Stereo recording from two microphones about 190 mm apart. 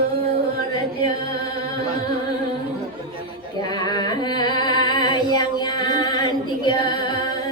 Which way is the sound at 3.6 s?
20° left (ahead or behind).